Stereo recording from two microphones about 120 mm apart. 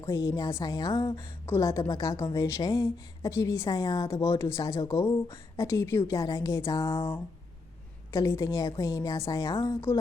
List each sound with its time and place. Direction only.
0.1 s a woman's voice: 25° left (ahead or behind)
1.5 s a woman's voice: 25° left (ahead or behind)
9.9 s a sound: 15° left (ahead or behind)